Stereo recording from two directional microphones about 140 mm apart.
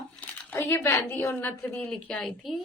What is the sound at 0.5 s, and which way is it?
A woman's voice, 15° left (ahead or behind).